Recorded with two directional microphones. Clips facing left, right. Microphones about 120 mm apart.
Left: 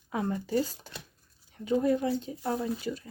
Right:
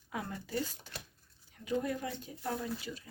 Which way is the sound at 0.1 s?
25° left (ahead or behind).